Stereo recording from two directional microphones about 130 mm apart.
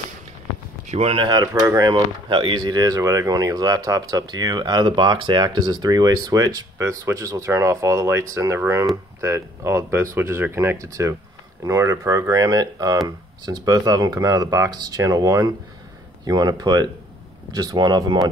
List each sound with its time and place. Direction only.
0.8 s speech: 50° right (ahead or behind); by 18.2 s 35° right (ahead or behind)